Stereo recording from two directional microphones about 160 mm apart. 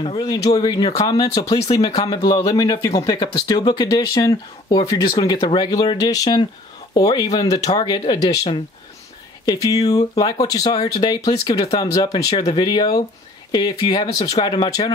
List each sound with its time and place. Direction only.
0.0 s speech: 30° left (ahead or behind)